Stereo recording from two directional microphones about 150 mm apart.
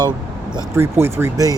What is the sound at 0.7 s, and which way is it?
Speech, 15° right (ahead or behind).